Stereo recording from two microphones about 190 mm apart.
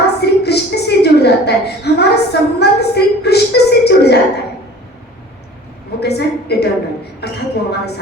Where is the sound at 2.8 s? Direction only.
60° left (ahead or behind).